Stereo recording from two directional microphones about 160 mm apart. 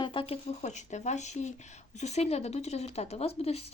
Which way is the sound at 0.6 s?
45° left (ahead or behind).